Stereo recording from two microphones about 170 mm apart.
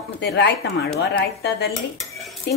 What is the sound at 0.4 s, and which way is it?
A woman's voice, 70° left (ahead or behind).